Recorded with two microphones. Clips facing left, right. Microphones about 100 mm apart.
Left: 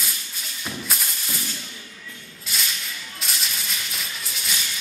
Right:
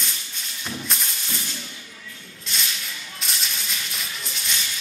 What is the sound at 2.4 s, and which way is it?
Music, 5° left (ahead or behind).